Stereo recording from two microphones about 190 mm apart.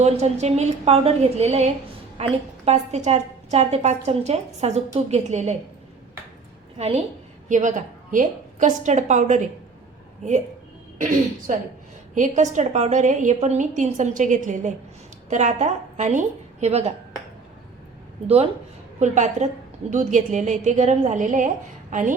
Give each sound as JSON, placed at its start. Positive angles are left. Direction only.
{"t": 0.0, "sound": "a woman's voice", "side_deg": -35}
{"t": 6.7, "sound": "a woman's voice", "side_deg": -35}
{"t": 10.9, "sound": "a woman's voice", "side_deg": -45}
{"t": 18.9, "sound": "a woman's voice", "side_deg": -40}